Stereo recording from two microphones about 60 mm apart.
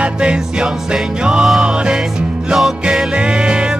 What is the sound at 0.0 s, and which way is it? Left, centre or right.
Music, centre.